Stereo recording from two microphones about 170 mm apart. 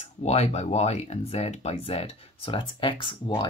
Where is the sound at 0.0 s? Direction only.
40° left (ahead or behind).